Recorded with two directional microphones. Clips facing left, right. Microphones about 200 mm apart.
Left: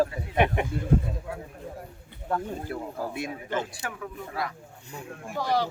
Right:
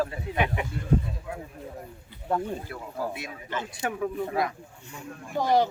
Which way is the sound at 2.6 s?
50° left (ahead or behind).